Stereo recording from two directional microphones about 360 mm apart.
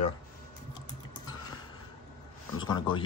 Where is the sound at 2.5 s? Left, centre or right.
Centre.